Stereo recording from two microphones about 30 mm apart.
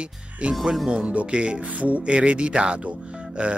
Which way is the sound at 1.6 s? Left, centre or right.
Right.